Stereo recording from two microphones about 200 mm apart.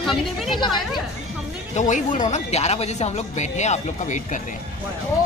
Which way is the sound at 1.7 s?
40° left (ahead or behind).